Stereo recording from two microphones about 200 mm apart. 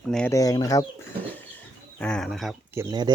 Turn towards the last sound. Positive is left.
turn(degrees=-20)  # may be behind; listen again after turning